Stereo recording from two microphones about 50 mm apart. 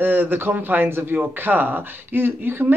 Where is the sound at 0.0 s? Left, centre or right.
Right.